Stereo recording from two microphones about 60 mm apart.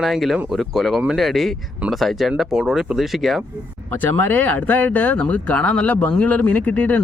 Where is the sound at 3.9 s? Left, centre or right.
Left.